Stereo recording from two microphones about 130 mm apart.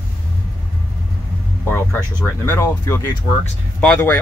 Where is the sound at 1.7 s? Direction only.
15° left (ahead or behind).